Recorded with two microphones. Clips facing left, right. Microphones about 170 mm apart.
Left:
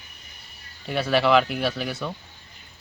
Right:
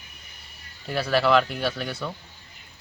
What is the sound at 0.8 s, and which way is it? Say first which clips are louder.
Speech: left 1 dB; centre (ahead or behind).